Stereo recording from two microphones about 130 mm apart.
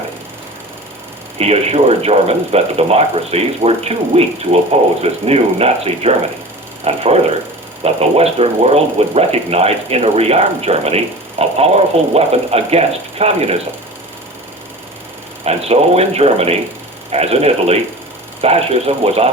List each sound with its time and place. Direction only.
1.4 s speech: 50° right (ahead or behind)
15.4 s speech: 50° right (ahead or behind)